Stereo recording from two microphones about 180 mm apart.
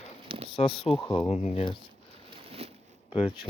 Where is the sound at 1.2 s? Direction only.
35° left (ahead or behind).